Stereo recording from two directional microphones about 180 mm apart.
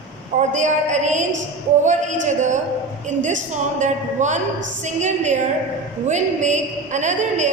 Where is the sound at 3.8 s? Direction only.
40° right (ahead or behind).